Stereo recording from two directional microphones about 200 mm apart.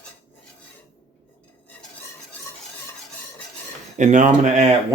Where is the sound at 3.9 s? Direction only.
40° right (ahead or behind).